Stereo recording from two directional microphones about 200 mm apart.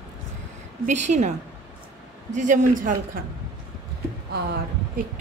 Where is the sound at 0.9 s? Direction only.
35° right (ahead or behind).